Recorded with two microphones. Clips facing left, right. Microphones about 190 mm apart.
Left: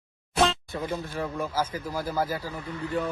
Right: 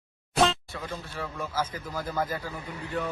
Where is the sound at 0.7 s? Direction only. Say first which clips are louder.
Left 6 dB; 15° left (ahead or behind).